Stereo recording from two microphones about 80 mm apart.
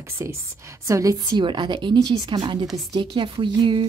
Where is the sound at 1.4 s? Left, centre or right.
Right.